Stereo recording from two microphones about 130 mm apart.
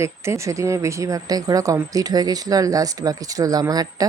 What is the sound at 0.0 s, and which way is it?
Speech, 20° right (ahead or behind).